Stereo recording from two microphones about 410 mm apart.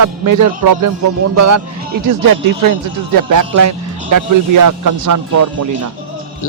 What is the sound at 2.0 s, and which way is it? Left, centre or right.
Speech, right.